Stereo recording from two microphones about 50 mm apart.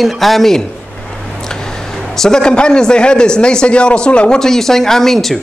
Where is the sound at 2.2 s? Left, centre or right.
Centre.